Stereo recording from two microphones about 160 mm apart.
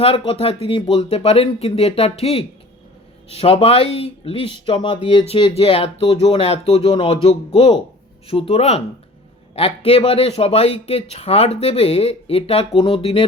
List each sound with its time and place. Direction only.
0.0 s speech: 40° left (ahead or behind)